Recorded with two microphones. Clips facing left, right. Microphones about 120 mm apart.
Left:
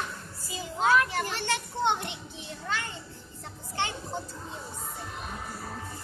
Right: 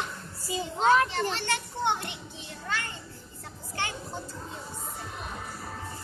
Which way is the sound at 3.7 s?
20° left (ahead or behind).